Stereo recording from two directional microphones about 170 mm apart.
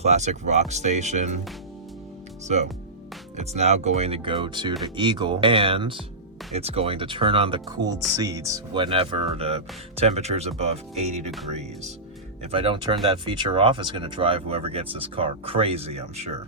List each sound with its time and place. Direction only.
0.0 s speech: 40° right (ahead or behind)
3.3 s speech: 40° right (ahead or behind); by 8.6 s 20° right (ahead or behind)
8.7 s speech: 30° right (ahead or behind)
12.4 s speech: 35° right (ahead or behind)